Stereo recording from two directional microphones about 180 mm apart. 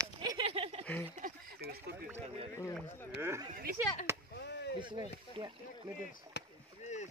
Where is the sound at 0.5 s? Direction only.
35° right (ahead or behind).